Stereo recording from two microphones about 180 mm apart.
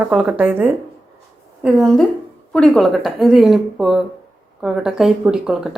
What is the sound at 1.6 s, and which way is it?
Speech, centre (ahead or behind).